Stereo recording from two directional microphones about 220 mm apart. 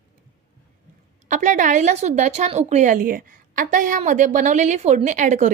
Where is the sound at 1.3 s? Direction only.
35° right (ahead or behind).